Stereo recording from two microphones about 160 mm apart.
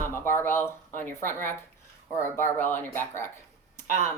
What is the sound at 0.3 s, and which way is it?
Speech, 15° left (ahead or behind).